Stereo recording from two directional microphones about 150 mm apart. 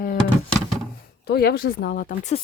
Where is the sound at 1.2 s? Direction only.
90° left; by 2.1 s 70° left (ahead or behind).